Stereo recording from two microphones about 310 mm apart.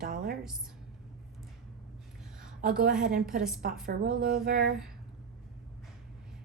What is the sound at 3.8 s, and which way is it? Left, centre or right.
Speech, right.